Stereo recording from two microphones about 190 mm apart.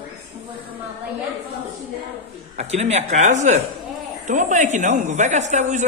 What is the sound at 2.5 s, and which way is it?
A woman's voice, 35° right (ahead or behind).